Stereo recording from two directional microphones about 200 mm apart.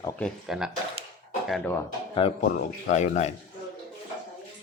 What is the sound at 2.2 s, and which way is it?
Speech, 30° left (ahead or behind).